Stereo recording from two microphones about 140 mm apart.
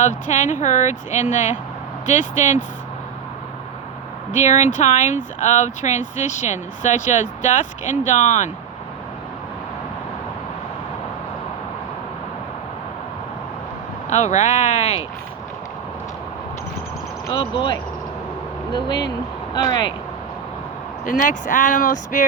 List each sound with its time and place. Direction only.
0.0 s speech: 60° left (ahead or behind)
4.3 s speech: 60° left (ahead or behind)
14.1 s speech: 55° left (ahead or behind)
17.3 s speech: 35° left (ahead or behind)
21.0 s speech: 70° left (ahead or behind)